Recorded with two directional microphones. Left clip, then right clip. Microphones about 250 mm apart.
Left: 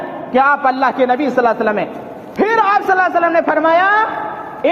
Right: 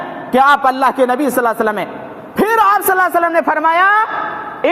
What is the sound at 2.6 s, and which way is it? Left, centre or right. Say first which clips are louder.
A man's voice: right 1 dB; right.